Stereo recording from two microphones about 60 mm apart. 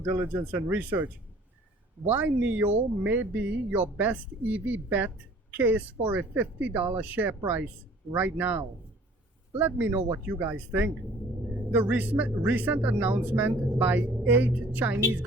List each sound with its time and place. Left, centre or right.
0.0 s speech: right
2.1 s speech: right